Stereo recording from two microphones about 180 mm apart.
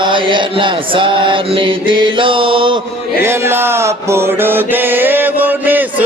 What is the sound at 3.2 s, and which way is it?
Mantra, 15° right (ahead or behind).